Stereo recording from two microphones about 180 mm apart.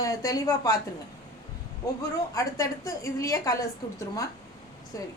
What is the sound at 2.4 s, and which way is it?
A woman's voice, 20° left (ahead or behind).